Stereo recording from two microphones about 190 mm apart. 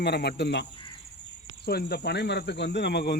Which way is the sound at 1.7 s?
55° left (ahead or behind).